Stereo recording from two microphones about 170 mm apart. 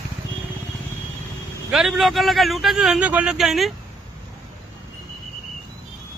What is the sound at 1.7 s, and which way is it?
A man's voice, centre (ahead or behind).